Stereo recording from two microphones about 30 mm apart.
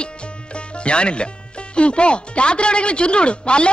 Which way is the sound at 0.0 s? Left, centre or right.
Left.